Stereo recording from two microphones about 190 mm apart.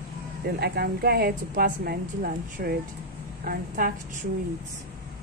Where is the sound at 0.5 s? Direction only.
55° right (ahead or behind).